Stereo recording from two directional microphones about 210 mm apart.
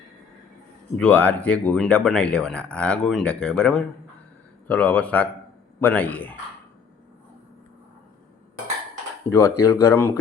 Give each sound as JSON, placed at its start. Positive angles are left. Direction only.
{"t": 0.9, "sound": "speech", "side_deg": 5}
{"t": 9.3, "sound": "speech", "side_deg": 15}